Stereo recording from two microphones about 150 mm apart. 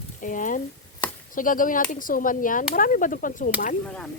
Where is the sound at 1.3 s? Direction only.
65° left (ahead or behind).